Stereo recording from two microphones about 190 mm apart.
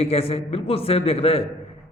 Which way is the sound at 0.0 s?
30° left (ahead or behind).